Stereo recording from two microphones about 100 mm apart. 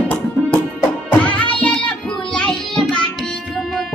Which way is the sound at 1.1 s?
15° left (ahead or behind).